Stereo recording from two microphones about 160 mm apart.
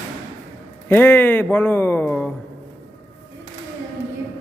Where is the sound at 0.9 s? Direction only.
10° left (ahead or behind).